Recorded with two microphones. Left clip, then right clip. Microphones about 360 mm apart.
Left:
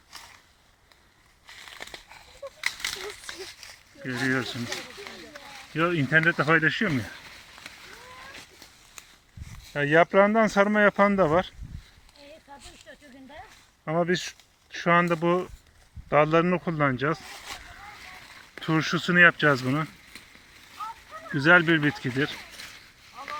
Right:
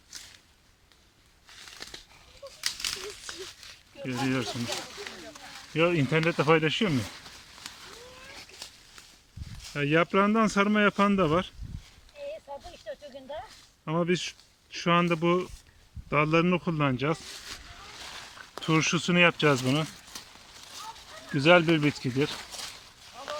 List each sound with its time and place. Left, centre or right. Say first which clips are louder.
2.6 s a sound: left 2 dB; centre
4.0 s speech: left 3 dB; centre
5.7 s speech: left 2 dB; centre
9.7 s speech: left 5 dB; centre
12.9 s a sound: right 12 dB; centre
13.8 s speech: left 3 dB; centre
18.6 s speech: even; centre
21.3 s speech: left 2 dB; centre